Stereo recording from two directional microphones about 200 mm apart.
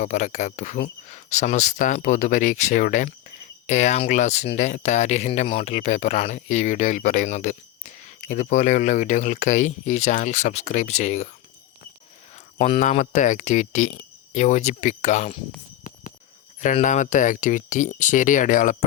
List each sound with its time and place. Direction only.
0.0 s speech: 35° left (ahead or behind)
12.5 s speech: 35° left (ahead or behind)
16.6 s speech: 40° left (ahead or behind)